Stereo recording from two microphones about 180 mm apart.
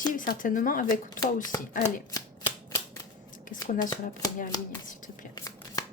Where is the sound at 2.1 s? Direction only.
15° left (ahead or behind).